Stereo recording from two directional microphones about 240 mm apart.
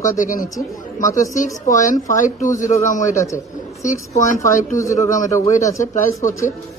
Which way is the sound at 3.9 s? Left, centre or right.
Left.